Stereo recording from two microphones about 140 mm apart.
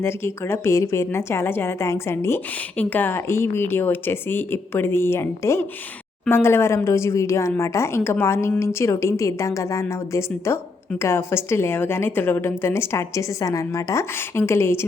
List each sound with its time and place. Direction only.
0.0 s a woman's voice: 20° left (ahead or behind)